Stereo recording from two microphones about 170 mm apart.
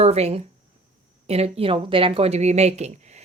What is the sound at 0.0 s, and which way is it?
A woman's voice, 40° right (ahead or behind).